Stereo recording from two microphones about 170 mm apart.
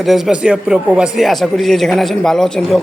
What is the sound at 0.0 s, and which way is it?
A woman's voice, centre (ahead or behind).